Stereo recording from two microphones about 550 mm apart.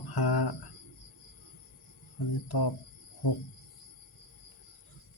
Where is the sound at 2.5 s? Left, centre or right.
Left.